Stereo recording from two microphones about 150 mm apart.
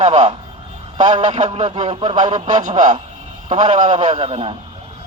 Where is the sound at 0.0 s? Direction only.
50° right (ahead or behind).